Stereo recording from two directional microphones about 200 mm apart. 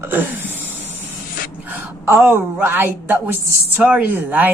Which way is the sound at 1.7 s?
10° right (ahead or behind).